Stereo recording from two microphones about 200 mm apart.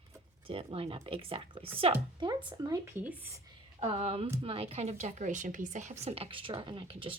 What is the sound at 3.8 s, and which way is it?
Speech, 30° right (ahead or behind).